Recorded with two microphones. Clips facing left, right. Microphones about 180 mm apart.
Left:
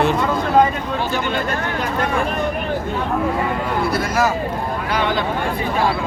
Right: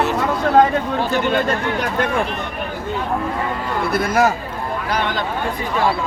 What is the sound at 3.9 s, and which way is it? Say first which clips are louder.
Speech: right 5 dB; 55° right (ahead or behind).